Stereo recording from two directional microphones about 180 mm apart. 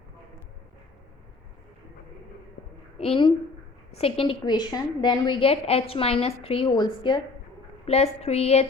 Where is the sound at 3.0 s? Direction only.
30° left (ahead or behind).